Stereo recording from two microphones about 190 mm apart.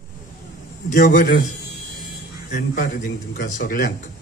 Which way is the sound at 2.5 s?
45° left (ahead or behind).